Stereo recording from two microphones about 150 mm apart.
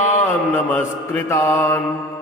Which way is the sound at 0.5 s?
10° left (ahead or behind).